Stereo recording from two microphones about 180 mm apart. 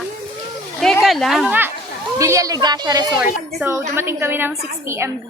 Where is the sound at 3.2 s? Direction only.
10° right (ahead or behind).